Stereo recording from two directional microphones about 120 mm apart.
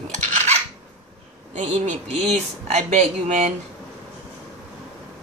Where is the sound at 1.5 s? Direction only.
70° right (ahead or behind).